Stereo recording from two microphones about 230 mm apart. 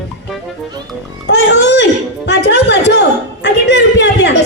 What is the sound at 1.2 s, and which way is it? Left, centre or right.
Music, left.